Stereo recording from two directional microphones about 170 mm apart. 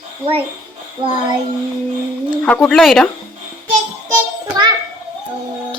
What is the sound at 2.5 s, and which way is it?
Speech, 5° left (ahead or behind).